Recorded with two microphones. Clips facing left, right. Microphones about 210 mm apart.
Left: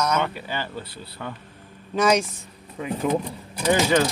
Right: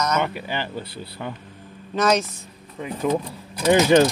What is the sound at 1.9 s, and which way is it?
Speech, 10° left (ahead or behind).